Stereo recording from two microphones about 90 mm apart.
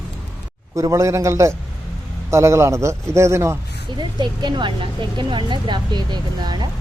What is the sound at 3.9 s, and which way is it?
Speech, 55° right (ahead or behind).